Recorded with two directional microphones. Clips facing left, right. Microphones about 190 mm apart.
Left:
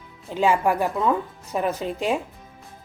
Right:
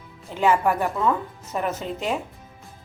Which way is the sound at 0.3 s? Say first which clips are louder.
Even; 15° left (ahead or behind).